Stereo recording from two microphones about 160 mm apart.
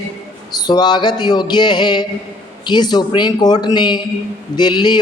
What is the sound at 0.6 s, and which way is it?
A man's voice, 25° left (ahead or behind).